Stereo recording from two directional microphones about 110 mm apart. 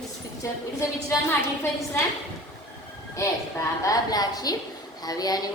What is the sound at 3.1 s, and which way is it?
A woman's voice, 30° left (ahead or behind).